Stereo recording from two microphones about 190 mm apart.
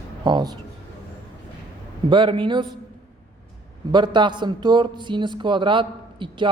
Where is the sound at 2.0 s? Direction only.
25° right (ahead or behind).